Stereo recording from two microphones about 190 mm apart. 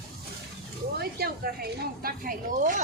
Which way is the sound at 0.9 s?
55° right (ahead or behind).